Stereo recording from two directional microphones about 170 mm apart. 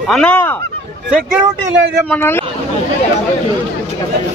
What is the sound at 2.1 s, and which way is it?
Speech, 15° left (ahead or behind).